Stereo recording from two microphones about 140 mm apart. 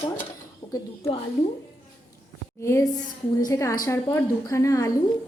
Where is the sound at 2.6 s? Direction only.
20° left (ahead or behind).